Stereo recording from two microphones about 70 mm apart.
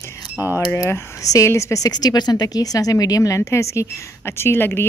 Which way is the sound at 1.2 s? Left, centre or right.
Left.